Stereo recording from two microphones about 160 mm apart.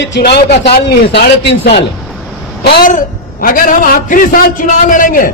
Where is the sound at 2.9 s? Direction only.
60° left (ahead or behind).